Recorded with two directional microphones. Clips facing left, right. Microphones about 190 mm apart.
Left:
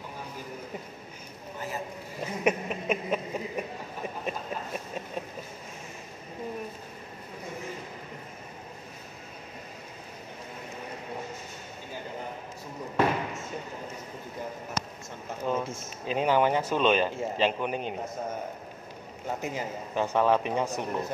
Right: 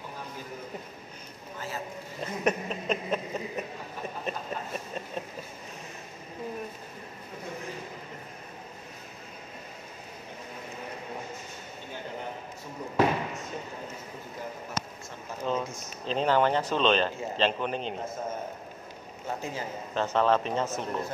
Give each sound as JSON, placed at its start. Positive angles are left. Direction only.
{"t": 2.2, "sound": "speech", "side_deg": 10}
{"t": 12.9, "sound": "basketball bounce", "side_deg": -15}
{"t": 15.4, "sound": "a sound", "side_deg": 10}
{"t": 16.1, "sound": "speech", "side_deg": 10}
{"t": 19.4, "sound": "a man's voice", "side_deg": 15}